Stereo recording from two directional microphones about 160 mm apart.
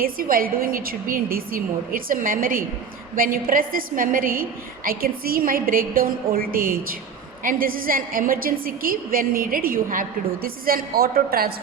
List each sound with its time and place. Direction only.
0.0 s a woman's voice: 65° right (ahead or behind)